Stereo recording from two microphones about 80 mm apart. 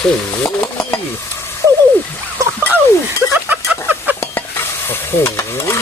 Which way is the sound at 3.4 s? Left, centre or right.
Right.